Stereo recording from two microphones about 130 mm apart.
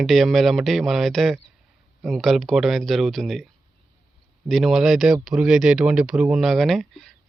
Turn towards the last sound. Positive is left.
turn(degrees=0)  # may be behind; listen again after turning